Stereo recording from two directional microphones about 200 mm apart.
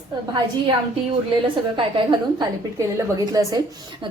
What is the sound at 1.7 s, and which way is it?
Speech, 25° right (ahead or behind).